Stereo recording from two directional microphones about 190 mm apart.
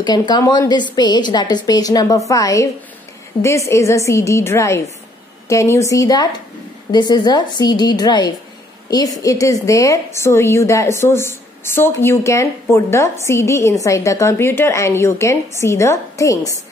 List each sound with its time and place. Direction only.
0.0 s a woman's voice: 20° left (ahead or behind)